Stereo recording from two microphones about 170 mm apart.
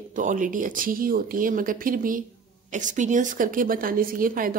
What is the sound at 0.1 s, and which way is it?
A woman's voice, 50° right (ahead or behind).